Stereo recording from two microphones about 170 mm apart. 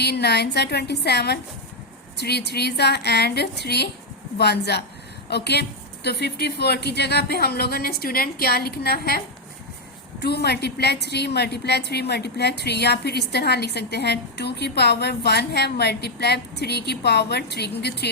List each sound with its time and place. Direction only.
0.0 s a woman's voice: 75° left (ahead or behind)